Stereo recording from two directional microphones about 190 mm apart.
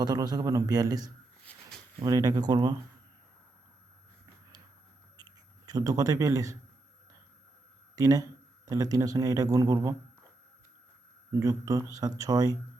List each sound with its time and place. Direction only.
0.0 s speech: 20° right (ahead or behind)
1.5 s a sound: 5° left (ahead or behind)
2.0 s speech: 20° right (ahead or behind)
5.1 s a sound: 20° right (ahead or behind)
7.9 s speech: 20° right (ahead or behind)
11.3 s speech: 15° right (ahead or behind)